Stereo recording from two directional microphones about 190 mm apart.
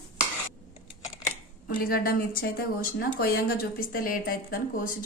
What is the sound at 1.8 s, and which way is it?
A woman's voice, 50° left (ahead or behind).